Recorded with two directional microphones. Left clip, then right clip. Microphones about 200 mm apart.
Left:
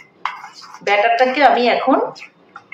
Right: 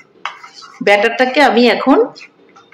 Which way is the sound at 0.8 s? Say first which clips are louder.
Right 2 dB; 50° right (ahead or behind).